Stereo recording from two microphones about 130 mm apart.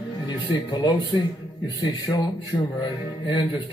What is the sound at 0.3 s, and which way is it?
Speech, 35° left (ahead or behind).